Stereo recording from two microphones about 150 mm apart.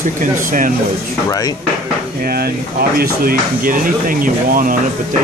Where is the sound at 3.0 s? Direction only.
75° right (ahead or behind).